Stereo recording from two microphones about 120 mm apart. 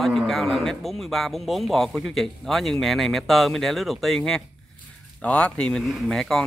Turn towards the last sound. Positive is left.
turn(degrees=5)  # may be behind; listen again after turning